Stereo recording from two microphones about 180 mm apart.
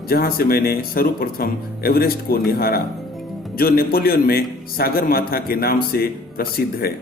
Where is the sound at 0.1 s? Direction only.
55° left (ahead or behind).